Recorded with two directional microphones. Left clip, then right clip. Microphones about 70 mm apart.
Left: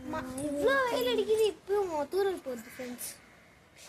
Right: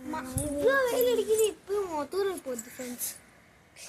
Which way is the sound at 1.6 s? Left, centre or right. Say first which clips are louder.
Left 1 dB; left.